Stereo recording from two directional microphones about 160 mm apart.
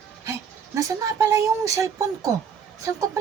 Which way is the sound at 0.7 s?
20° right (ahead or behind).